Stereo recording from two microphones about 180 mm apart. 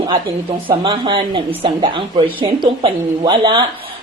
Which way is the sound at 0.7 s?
25° right (ahead or behind).